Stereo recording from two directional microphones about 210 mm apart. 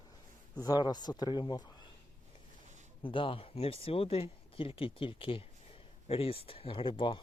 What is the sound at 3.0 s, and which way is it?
Speech, 25° left (ahead or behind).